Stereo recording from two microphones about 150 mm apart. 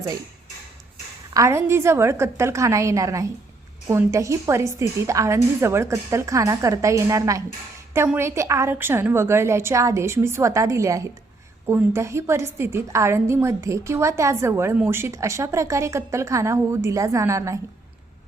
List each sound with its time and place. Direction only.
1.3 s a woman's voice: 20° right (ahead or behind)